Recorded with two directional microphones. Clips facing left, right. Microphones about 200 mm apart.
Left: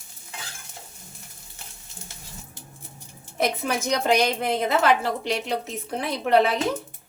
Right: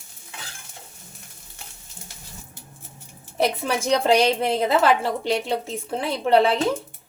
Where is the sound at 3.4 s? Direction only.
30° right (ahead or behind).